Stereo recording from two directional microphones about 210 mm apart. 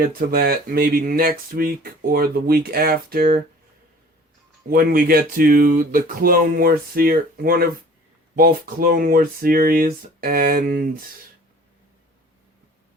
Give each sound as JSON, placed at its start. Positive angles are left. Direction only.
{"t": 0.0, "sound": "speech", "side_deg": -45}
{"t": 4.7, "sound": "speech", "side_deg": -45}